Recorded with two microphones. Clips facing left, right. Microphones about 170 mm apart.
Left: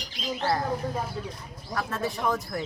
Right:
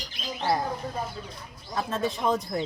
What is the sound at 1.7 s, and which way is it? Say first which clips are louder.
Speech: right 2 dB; 20° right (ahead or behind).